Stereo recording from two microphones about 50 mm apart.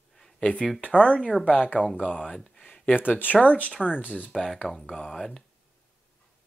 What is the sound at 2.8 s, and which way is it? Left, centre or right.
Speech, left.